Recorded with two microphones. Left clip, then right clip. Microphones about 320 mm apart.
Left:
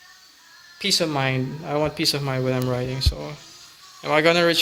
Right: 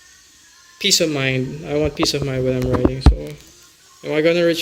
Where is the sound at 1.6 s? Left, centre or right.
Left.